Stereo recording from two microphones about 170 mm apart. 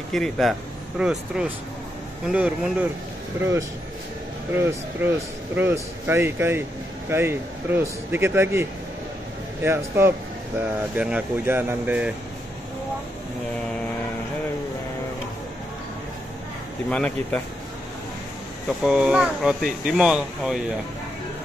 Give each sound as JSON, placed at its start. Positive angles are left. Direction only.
{"t": 0.1, "sound": "speech", "side_deg": 0}
{"t": 16.9, "sound": "speech", "side_deg": 5}
{"t": 18.9, "sound": "speech", "side_deg": -5}